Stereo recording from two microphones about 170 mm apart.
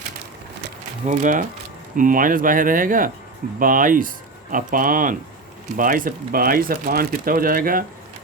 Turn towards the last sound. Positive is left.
turn(degrees=-55)  # may be behind; listen again after turning